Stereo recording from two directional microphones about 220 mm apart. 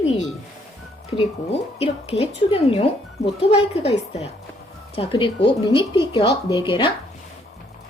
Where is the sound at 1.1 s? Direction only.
25° left (ahead or behind).